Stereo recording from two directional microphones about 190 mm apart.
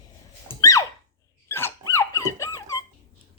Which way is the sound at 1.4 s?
10° left (ahead or behind).